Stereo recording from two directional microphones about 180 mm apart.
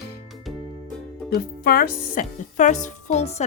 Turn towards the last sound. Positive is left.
turn(degrees=35)  # may be behind; listen again after turning